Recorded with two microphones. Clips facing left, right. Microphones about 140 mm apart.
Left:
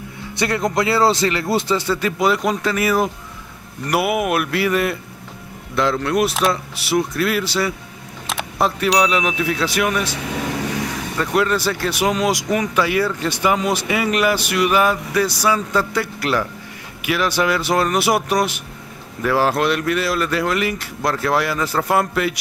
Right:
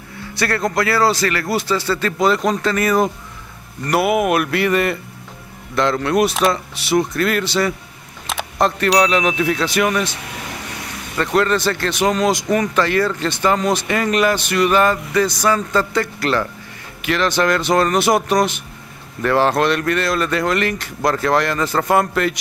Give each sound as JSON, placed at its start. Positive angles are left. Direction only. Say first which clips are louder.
{"t": 0.3, "sound": "speech", "louder": "even", "side_deg": 20}
{"t": 11.1, "sound": "speech", "louder": "right 2 dB", "side_deg": 5}